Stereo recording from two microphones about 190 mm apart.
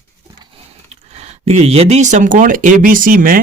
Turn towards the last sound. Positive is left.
turn(degrees=-50)  # may be behind; listen again after turning